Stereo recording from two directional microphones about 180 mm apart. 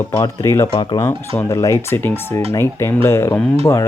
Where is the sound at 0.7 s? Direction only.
25° left (ahead or behind).